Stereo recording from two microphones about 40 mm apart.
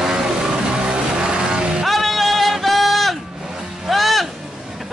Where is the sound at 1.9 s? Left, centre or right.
Centre.